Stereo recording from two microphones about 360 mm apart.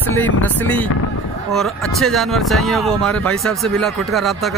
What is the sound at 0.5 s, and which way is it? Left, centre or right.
Speech, centre.